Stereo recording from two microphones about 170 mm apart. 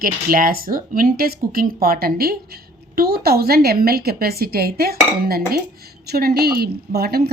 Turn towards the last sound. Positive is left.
turn(degrees=-70)  # may be behind; listen again after turning